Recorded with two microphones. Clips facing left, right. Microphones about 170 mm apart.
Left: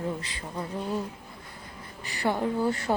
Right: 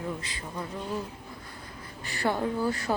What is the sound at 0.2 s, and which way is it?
Speech, 35° left (ahead or behind).